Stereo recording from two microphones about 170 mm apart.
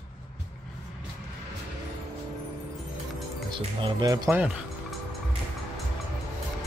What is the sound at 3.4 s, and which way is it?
Speech, 30° right (ahead or behind).